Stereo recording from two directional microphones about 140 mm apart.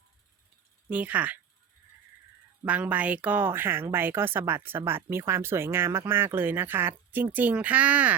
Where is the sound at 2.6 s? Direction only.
10° right (ahead or behind).